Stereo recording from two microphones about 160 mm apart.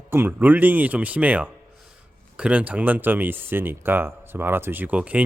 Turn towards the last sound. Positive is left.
turn(degrees=-10)  # may be behind; listen again after turning